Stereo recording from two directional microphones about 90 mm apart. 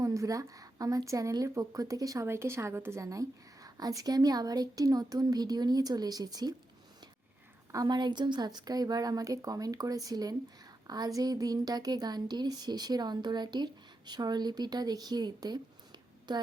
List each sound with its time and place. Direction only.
0.0 s a woman's voice: 35° right (ahead or behind)
2.2 s speech: 30° right (ahead or behind); by 6.5 s 45° right (ahead or behind)
7.9 s speech: 55° right (ahead or behind)